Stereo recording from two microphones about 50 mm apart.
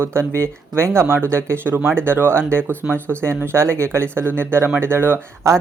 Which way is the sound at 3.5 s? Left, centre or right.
Right.